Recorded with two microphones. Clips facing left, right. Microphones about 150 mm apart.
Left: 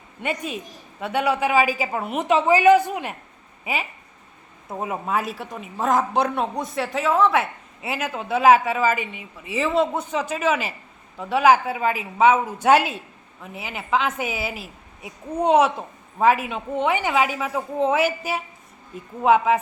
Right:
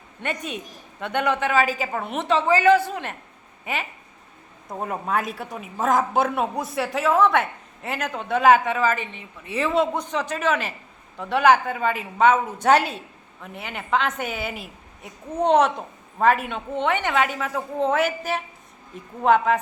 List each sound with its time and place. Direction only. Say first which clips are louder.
0.2 s a woman's voice: left 2 dB; 5° left (ahead or behind)